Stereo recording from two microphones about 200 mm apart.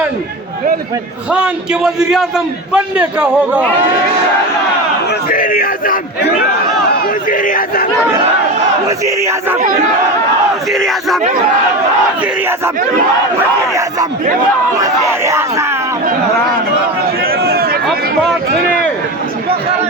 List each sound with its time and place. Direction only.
1.3 s a man's voice: 5° right (ahead or behind)
5.3 s a sound: 45° left (ahead or behind)
7.3 s chatter: 45° left (ahead or behind)
9.0 s speech: 15° right (ahead or behind)
10.7 s battle cry: centre (ahead or behind)
14.8 s speech: 15° right (ahead or behind)
17.2 s a sound: 50° right (ahead or behind)